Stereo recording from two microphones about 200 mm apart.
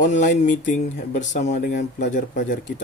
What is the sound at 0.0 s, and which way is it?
Speech, 40° left (ahead or behind).